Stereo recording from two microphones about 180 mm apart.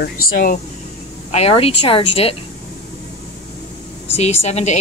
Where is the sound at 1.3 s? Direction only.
35° left (ahead or behind).